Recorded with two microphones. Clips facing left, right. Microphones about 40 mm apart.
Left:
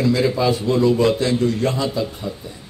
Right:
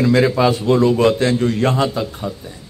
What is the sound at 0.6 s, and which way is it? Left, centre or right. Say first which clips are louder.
Speech: right 2 dB; right.